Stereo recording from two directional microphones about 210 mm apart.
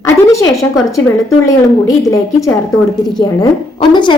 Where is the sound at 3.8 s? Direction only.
20° left (ahead or behind).